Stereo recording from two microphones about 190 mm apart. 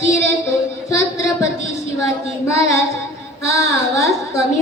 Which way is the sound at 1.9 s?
15° left (ahead or behind).